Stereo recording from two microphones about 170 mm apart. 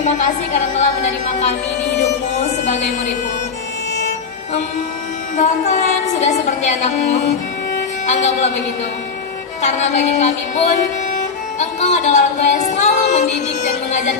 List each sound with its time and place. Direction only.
0.0 s a woman's voice: 45° left (ahead or behind)
5.4 s a woman's voice: 45° left (ahead or behind)
9.6 s a woman's voice: 45° left (ahead or behind)